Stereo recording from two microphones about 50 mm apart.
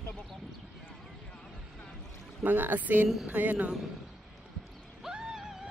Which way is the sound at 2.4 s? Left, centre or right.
Right.